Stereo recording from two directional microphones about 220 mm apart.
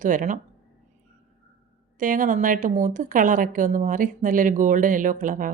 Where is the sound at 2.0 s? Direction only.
40° right (ahead or behind).